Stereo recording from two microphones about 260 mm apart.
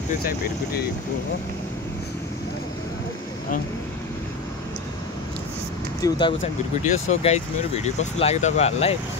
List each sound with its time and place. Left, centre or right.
5.9 s speech: centre